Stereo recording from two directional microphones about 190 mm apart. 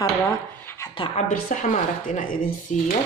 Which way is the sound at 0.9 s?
25° left (ahead or behind).